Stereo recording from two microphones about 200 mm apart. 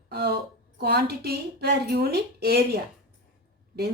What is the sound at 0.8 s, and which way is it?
A woman's voice, 55° right (ahead or behind).